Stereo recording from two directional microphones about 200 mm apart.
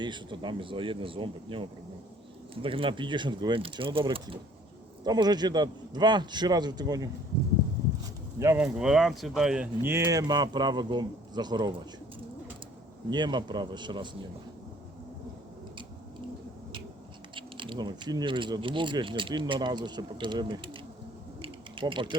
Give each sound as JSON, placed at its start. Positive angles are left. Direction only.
{"t": 0.0, "sound": "speech", "side_deg": -25}
{"t": 8.4, "sound": "speech", "side_deg": -15}
{"t": 8.6, "sound": "speech", "side_deg": -5}
{"t": 13.1, "sound": "speech", "side_deg": -20}
{"t": 17.3, "sound": "speech", "side_deg": -25}
{"t": 21.4, "sound": "a sound", "side_deg": -25}